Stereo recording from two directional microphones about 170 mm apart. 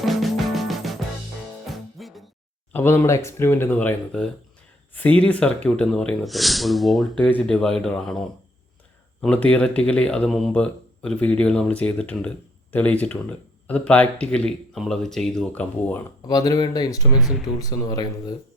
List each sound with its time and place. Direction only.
0.0 s music: centre (ahead or behind)
2.7 s speech: 15° left (ahead or behind)
9.2 s speech: 5° left (ahead or behind)
16.2 s speech: 20° left (ahead or behind)